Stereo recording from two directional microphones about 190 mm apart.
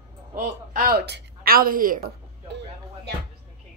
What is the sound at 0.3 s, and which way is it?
A woman's voice, 45° right (ahead or behind).